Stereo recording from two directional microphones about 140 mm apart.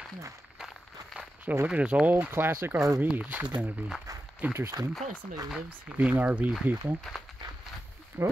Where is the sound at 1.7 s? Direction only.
10° right (ahead or behind).